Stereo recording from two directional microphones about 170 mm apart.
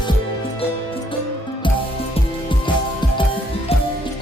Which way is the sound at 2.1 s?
30° left (ahead or behind).